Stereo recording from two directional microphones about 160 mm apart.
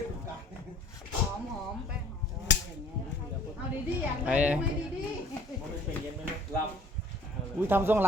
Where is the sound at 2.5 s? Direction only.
90° left.